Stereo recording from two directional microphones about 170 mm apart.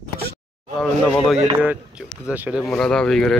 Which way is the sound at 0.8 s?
5° left (ahead or behind).